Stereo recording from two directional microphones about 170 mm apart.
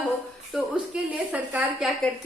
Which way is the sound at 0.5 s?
5° right (ahead or behind).